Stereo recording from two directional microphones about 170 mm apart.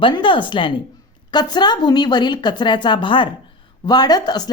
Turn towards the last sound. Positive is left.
turn(degrees=25)  # may be behind; listen again after turning